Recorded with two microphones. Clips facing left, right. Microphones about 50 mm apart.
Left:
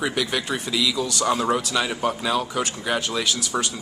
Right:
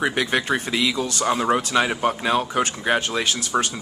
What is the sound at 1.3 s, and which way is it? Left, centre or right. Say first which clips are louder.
Speech: right 3 dB; right.